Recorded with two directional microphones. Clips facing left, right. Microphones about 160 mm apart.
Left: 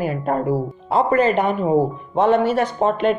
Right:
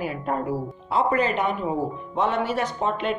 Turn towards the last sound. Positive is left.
turn(degrees=50)  # may be behind; listen again after turning